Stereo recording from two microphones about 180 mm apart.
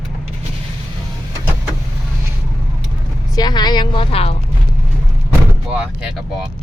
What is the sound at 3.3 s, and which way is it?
A woman's voice, 25° left (ahead or behind).